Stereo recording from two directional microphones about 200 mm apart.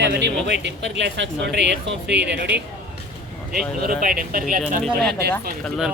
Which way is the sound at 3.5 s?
45° right (ahead or behind).